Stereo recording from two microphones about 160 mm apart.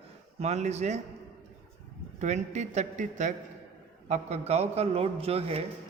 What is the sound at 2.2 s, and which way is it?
A man's voice, 45° right (ahead or behind).